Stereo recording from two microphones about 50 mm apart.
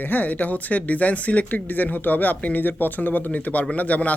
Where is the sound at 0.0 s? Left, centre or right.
Left.